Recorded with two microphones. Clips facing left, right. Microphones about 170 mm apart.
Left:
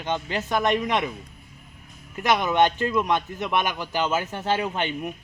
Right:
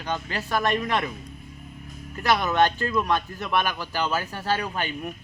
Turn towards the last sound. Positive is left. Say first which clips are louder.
# left 3 dB
turn(degrees=20)  # may be behind; listen again after turning